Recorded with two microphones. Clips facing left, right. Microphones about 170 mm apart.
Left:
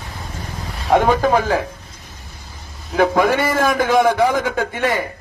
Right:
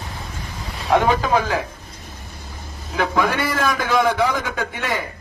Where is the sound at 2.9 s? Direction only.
50° left (ahead or behind).